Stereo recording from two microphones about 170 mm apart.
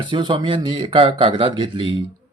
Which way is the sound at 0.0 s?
30° right (ahead or behind).